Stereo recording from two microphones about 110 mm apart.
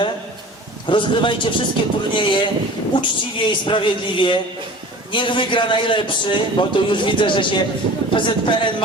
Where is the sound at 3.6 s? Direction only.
45° left (ahead or behind).